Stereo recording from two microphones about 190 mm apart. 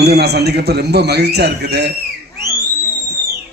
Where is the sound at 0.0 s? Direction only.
60° right (ahead or behind).